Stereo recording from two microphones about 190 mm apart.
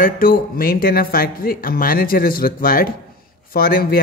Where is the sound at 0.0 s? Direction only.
50° left (ahead or behind).